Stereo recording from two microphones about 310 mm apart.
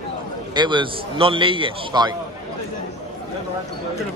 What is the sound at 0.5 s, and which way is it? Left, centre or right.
A man's voice, centre.